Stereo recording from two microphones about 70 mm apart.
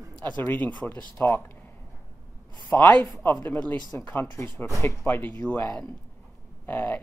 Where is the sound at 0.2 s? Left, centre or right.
Left.